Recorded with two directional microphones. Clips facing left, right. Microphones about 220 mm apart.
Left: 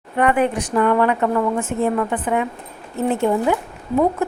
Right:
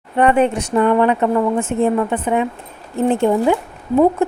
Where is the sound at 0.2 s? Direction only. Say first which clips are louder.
Right 3 dB; 25° right (ahead or behind).